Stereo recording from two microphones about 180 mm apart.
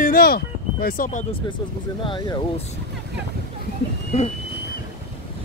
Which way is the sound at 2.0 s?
25° left (ahead or behind).